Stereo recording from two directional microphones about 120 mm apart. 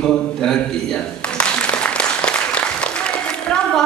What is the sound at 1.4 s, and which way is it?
Applause, 10° left (ahead or behind).